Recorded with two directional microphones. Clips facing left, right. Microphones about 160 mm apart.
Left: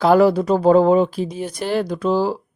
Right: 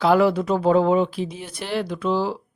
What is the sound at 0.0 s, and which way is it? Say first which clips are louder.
Speech: left 4 dB; 40° left (ahead or behind).